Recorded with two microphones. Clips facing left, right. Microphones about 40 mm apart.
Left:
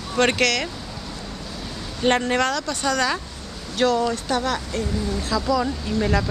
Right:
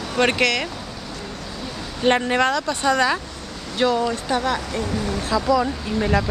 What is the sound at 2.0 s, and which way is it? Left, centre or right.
Speech, centre.